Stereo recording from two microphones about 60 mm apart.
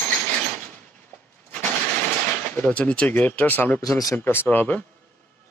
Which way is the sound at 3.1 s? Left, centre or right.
Left.